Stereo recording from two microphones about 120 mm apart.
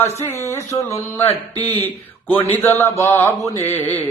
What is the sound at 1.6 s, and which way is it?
Speech, 60° left (ahead or behind).